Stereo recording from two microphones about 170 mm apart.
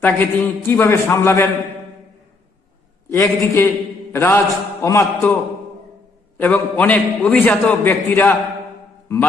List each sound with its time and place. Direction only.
0.0 s a man's voice: 10° left (ahead or behind)
3.1 s a man's voice: 15° left (ahead or behind)